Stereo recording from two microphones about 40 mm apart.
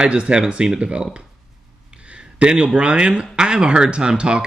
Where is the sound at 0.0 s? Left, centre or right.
Right.